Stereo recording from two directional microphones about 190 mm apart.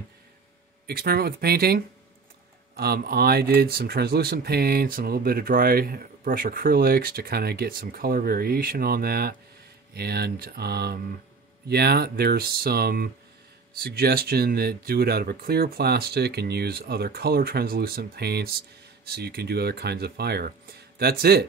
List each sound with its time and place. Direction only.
0.8 s speech: 55° right (ahead or behind)
2.8 s speech: 55° right (ahead or behind)